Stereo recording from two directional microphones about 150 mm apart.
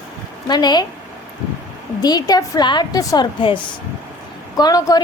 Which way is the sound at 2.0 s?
25° left (ahead or behind).